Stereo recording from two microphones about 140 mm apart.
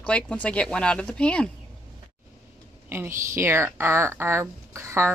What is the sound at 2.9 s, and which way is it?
Speech, 15° right (ahead or behind).